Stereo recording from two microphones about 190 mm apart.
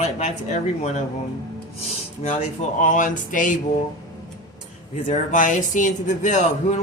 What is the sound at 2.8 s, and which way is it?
Speech, 45° left (ahead or behind).